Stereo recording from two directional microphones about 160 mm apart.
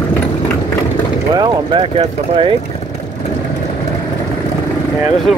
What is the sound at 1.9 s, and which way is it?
Speech, 35° right (ahead or behind).